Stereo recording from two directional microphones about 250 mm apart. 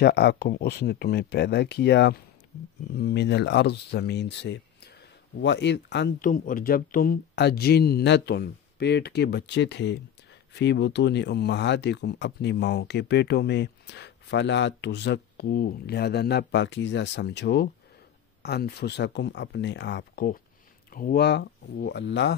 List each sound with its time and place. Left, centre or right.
0.0 s speech: left